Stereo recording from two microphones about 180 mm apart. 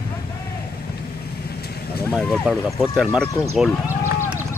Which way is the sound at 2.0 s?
5° left (ahead or behind).